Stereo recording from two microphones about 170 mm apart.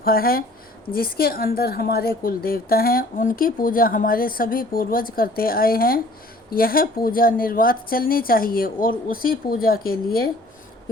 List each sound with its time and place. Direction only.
0.0 s a woman's voice: 60° left (ahead or behind)